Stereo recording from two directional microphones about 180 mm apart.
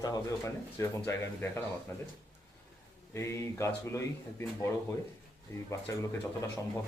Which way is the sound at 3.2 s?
15° left (ahead or behind).